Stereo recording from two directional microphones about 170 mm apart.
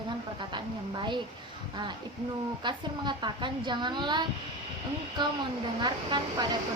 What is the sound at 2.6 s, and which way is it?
A woman's voice, 25° right (ahead or behind).